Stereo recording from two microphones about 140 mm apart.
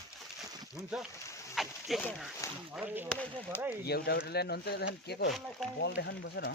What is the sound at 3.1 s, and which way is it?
Speech, 10° left (ahead or behind).